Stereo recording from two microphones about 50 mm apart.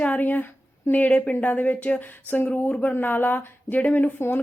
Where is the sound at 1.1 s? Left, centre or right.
Left.